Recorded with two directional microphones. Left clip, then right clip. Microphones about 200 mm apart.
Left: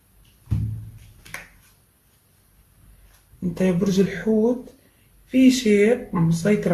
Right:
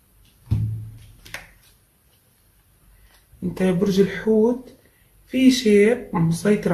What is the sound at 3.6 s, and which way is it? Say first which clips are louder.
Speech: right 2 dB; 20° right (ahead or behind).